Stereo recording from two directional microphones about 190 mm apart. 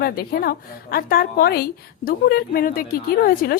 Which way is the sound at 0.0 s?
55° left (ahead or behind).